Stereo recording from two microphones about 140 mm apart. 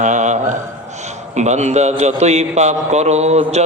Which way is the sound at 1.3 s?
55° right (ahead or behind).